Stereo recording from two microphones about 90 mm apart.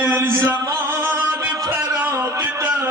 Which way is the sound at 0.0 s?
25° right (ahead or behind).